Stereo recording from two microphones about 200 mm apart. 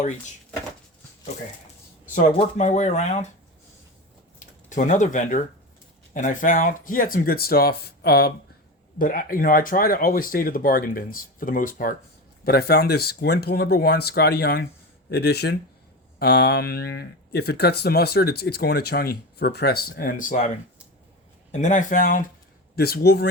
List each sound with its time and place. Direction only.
2.1 s speech: 40° left (ahead or behind)
4.7 s speech: 40° left (ahead or behind)
21.5 s speech: 40° left (ahead or behind)